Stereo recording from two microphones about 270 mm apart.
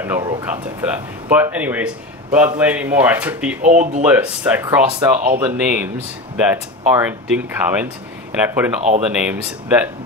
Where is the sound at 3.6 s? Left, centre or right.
Right.